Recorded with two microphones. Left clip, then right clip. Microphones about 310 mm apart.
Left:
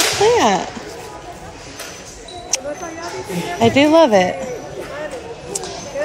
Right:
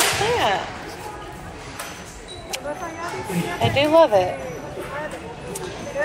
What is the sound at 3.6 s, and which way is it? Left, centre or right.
Speech, left.